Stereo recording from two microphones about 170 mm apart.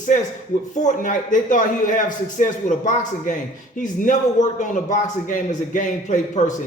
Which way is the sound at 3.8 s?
50° left (ahead or behind).